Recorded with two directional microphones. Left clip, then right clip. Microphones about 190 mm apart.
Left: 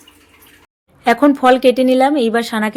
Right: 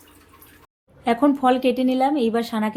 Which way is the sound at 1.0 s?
15° left (ahead or behind).